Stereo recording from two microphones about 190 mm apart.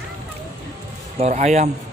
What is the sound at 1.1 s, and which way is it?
Speech, 35° right (ahead or behind).